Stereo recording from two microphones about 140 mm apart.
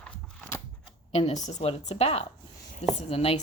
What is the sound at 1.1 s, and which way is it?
A woman's voice, 50° left (ahead or behind).